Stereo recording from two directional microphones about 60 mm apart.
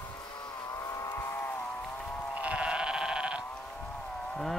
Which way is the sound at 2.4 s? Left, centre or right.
Right.